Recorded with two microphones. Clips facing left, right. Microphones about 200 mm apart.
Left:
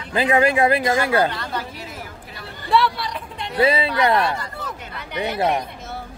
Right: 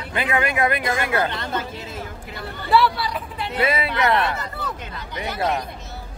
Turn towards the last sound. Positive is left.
turn(degrees=30)  # may be behind; listen again after turning